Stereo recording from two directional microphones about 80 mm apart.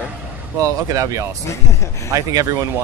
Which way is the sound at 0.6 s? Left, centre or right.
Right.